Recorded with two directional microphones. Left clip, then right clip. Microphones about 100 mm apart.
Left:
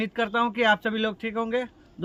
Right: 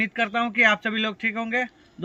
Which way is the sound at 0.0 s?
35° left (ahead or behind).